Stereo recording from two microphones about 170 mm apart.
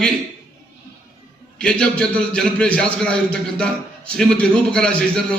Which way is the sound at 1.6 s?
5° left (ahead or behind).